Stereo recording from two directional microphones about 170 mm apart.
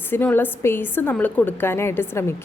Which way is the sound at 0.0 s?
10° left (ahead or behind).